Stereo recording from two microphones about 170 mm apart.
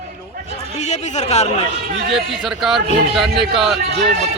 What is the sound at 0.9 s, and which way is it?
Speech, 40° left (ahead or behind).